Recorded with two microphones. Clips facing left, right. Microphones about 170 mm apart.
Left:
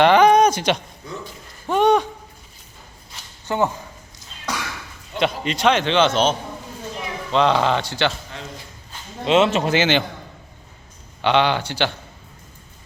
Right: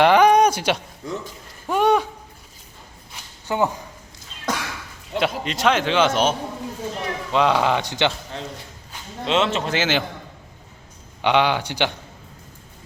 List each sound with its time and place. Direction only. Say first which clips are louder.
0.0 s a sound: left 1 dB; 10° right (ahead or behind)
3.4 s speech: even; 15° right (ahead or behind)
4.5 s a sound: right 2 dB; 50° right (ahead or behind)
5.1 s a man's voice: left 1 dB; centre (ahead or behind)
7.3 s speech: left 1 dB; 10° right (ahead or behind)
9.2 s speech: left 4 dB; 10° left (ahead or behind)
11.2 s speech: left 1 dB; 10° right (ahead or behind)